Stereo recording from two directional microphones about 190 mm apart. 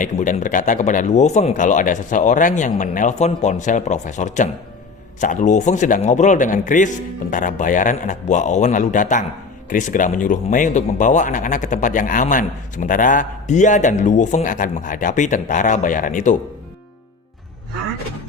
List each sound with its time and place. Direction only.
0.0 s speech: 40° left (ahead or behind)